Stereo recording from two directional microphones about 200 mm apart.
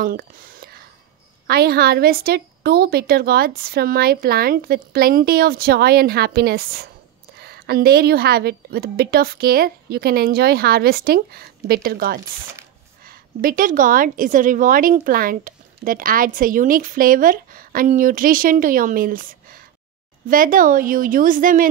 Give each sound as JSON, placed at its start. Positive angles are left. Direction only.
{"t": 0.0, "sound": "a woman's voice", "side_deg": -50}